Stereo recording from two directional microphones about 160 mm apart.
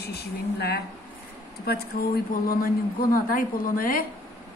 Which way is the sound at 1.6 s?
75° left (ahead or behind).